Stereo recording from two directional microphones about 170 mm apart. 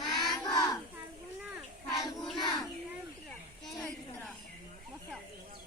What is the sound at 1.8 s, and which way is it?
Child singing, centre (ahead or behind).